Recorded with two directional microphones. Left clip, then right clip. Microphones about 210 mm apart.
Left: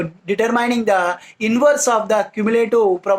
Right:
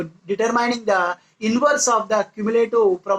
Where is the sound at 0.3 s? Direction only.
35° left (ahead or behind).